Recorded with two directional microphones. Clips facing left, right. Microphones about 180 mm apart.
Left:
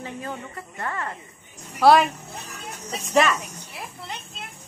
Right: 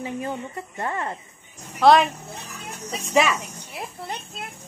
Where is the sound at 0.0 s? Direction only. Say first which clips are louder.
Right 4 dB; 20° right (ahead or behind).